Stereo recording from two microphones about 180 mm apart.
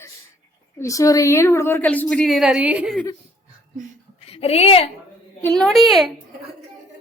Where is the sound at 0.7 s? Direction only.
15° left (ahead or behind); by 3.0 s 5° right (ahead or behind).